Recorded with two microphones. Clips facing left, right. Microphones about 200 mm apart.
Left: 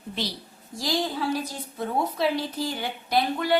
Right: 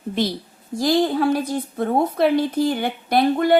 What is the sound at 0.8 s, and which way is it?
A woman's voice, 55° right (ahead or behind).